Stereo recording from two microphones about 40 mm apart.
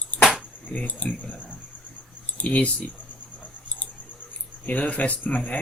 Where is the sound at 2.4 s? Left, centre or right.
Left.